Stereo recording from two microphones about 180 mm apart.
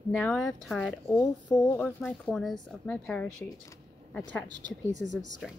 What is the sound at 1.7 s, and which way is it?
Speech, 5° left (ahead or behind).